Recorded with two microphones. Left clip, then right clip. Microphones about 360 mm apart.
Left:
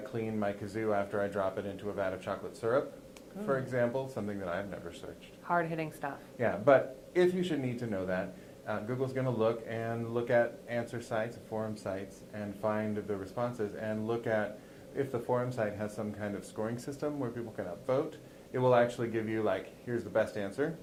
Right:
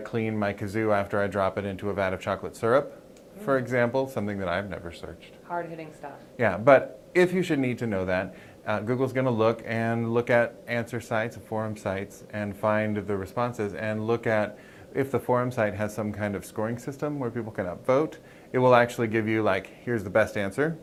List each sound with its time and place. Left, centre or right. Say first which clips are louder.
0.1 s speech: right 7 dB; right
5.5 s a woman's voice: left 1 dB; left
6.4 s speech: right 7 dB; right